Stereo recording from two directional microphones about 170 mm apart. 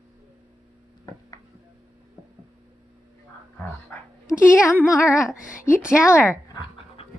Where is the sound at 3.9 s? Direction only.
15° left (ahead or behind).